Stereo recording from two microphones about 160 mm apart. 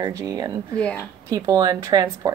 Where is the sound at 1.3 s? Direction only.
25° right (ahead or behind).